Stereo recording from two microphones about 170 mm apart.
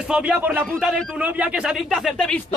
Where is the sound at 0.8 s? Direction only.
Centre (ahead or behind).